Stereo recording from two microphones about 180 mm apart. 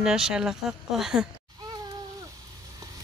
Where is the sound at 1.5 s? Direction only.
20° right (ahead or behind).